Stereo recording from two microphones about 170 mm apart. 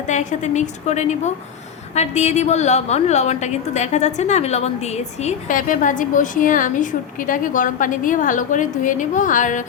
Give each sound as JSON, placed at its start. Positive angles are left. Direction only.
{"t": 0.1, "sound": "a woman's voice", "side_deg": 45}